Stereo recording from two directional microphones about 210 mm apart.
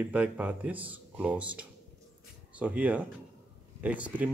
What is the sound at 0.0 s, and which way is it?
Speech, 5° right (ahead or behind).